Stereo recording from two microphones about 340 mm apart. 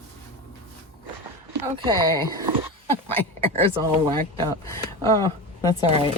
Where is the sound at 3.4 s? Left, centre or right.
Centre.